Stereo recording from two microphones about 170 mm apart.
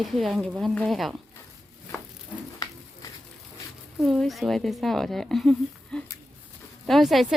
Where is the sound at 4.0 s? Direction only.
Centre (ahead or behind).